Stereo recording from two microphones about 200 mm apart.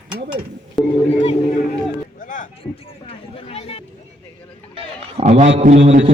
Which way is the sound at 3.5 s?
30° left (ahead or behind).